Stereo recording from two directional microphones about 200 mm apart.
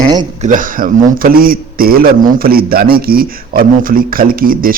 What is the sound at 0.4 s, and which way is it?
A man's voice, 40° right (ahead or behind).